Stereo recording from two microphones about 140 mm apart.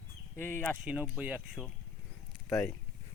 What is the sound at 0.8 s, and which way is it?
Speech, 10° right (ahead or behind).